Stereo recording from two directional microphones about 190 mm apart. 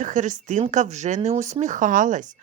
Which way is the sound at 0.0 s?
40° right (ahead or behind).